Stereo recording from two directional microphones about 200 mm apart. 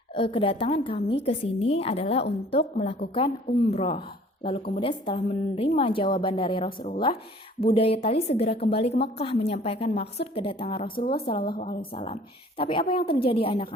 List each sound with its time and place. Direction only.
0.1 s a woman's voice: 25° left (ahead or behind)
6.7 s speech: 45° left (ahead or behind)
7.6 s a woman's voice: 30° left (ahead or behind)
11.5 s speech: 45° left (ahead or behind)
11.9 s a woman's voice: 30° left (ahead or behind)